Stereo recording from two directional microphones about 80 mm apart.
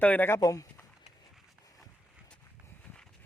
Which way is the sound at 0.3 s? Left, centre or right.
Left.